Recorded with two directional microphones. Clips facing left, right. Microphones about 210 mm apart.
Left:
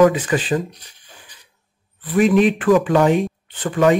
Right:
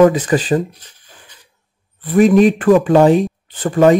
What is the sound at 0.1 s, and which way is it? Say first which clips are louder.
Speech: right 4 dB; 40° right (ahead or behind).